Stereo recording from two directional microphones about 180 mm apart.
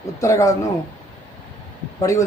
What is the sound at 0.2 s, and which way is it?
Speech, 15° left (ahead or behind).